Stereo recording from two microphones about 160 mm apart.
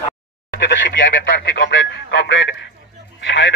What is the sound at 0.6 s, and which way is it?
Speech, 90° left.